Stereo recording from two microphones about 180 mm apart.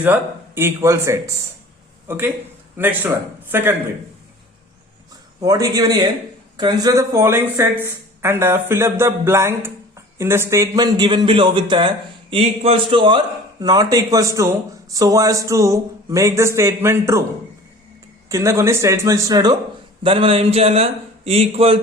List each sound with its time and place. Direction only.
0.0 s speech: 10° right (ahead or behind)
5.4 s a man's voice: 20° right (ahead or behind)
18.3 s speech: 15° right (ahead or behind); by 21.8 s 35° right (ahead or behind)